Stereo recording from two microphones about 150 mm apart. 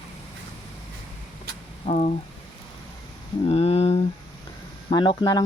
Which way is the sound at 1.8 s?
45° left (ahead or behind).